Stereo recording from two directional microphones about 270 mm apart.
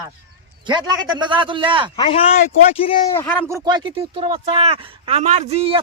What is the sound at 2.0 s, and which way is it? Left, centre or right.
A man's voice, left.